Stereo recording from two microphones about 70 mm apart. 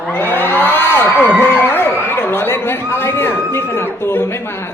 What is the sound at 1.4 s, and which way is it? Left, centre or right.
A man's voice, left.